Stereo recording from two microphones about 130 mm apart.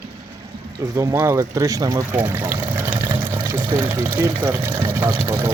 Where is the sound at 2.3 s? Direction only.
20° right (ahead or behind).